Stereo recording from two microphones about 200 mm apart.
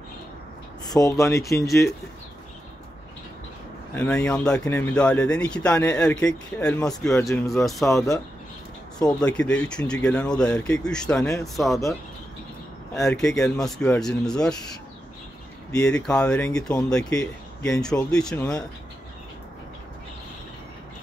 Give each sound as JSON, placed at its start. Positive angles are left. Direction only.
{"t": 0.9, "sound": "speech", "side_deg": 15}
{"t": 3.9, "sound": "speech", "side_deg": 5}
{"t": 9.2, "sound": "speech", "side_deg": 5}
{"t": 12.9, "sound": "speech", "side_deg": 5}
{"t": 15.7, "sound": "speech", "side_deg": 5}